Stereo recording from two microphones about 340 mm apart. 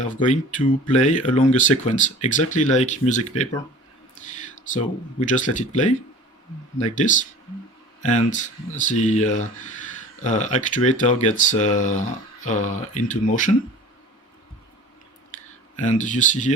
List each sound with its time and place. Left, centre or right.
0.0 s speech: left
6.9 s speech: left
15.8 s speech: left